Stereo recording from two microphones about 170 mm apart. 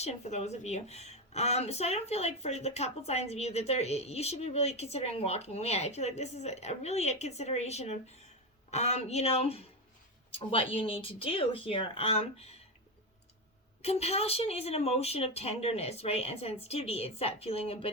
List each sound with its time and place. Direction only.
0.0 s a woman's voice: 40° left (ahead or behind)
13.8 s a woman's voice: 35° left (ahead or behind)